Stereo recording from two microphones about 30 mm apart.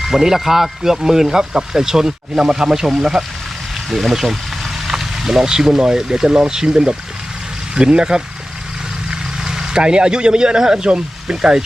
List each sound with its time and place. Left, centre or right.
0.0 s speech: centre
3.8 s speech: centre; by 6.5 s right
6.5 s speech: centre
9.0 s vehicle: right
9.8 s speech: right